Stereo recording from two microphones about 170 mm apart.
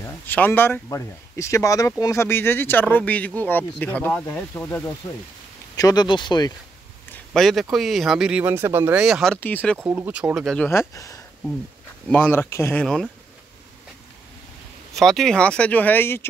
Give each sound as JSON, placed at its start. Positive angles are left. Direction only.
{"t": 0.0, "sound": "speech", "side_deg": 10}
{"t": 5.8, "sound": "speech", "side_deg": 25}
{"t": 7.1, "sound": "a sound", "side_deg": 0}
{"t": 7.7, "sound": "speech", "side_deg": 0}
{"t": 9.0, "sound": "speech", "side_deg": 0}
{"t": 9.8, "sound": "speech", "side_deg": -10}
{"t": 10.7, "sound": "speech", "side_deg": 15}
{"t": 12.8, "sound": "speech", "side_deg": 5}
{"t": 15.0, "sound": "speech", "side_deg": 0}